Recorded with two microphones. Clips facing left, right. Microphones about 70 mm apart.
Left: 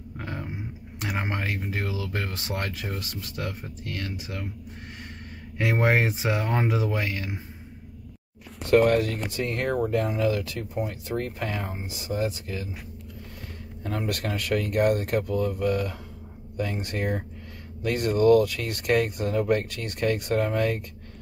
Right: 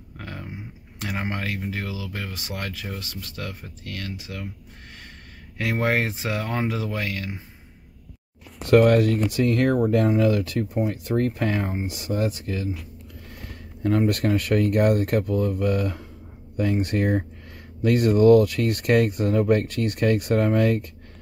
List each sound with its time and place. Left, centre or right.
0.2 s a sound: left
0.9 s speech: left
5.6 s speech: left
8.6 s speech: right
14.1 s speech: right